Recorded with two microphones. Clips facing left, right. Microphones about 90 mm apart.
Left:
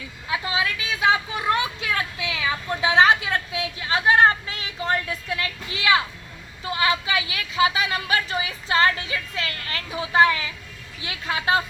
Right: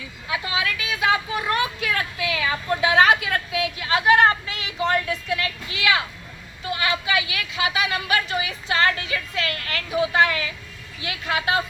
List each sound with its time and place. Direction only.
0.3 s vehicle: 30° left (ahead or behind)
1.5 s a sound: 20° left (ahead or behind)
6.7 s a woman's voice: 30° left (ahead or behind)